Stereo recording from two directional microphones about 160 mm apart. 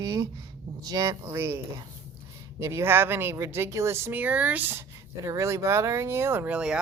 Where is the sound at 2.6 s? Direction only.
15° right (ahead or behind).